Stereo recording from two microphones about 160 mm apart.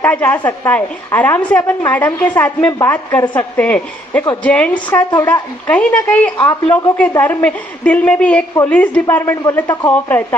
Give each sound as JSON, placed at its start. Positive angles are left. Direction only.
{"t": 0.0, "sound": "a woman's voice", "side_deg": 10}
{"t": 2.6, "sound": "a woman's voice", "side_deg": 20}
{"t": 2.9, "sound": "a woman's voice", "side_deg": 10}